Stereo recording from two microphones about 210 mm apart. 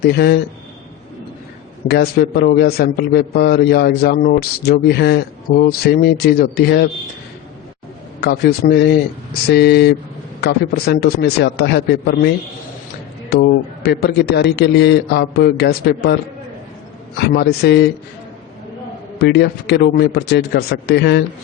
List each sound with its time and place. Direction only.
0.0 s a man's voice: 50° left (ahead or behind)
1.9 s a man's voice: 50° left (ahead or behind)
8.2 s a man's voice: 50° left (ahead or behind)
13.3 s a man's voice: 50° left (ahead or behind)
17.2 s a man's voice: 50° left (ahead or behind)
19.2 s a man's voice: 50° left (ahead or behind)